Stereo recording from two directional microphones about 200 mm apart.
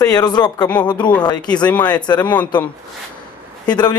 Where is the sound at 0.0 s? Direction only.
20° left (ahead or behind).